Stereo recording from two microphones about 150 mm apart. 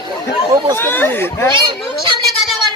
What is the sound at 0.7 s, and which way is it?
Speech, 15° left (ahead or behind).